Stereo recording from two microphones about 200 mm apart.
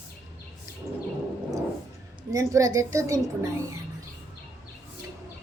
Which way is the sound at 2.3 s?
15° right (ahead or behind).